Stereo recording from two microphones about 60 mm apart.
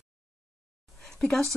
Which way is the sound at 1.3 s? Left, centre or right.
Centre.